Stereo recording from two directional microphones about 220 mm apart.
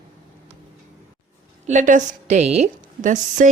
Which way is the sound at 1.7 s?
35° right (ahead or behind).